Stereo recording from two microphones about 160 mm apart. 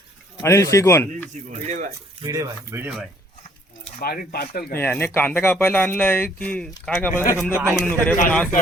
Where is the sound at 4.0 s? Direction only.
70° left (ahead or behind).